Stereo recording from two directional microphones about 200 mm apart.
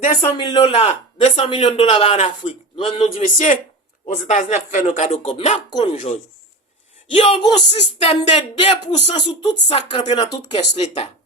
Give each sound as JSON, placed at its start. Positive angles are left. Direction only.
{"t": 0.2, "sound": "a man's voice", "side_deg": 25}